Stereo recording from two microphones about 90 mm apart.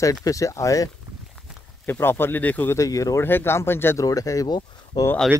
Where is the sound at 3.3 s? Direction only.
25° left (ahead or behind).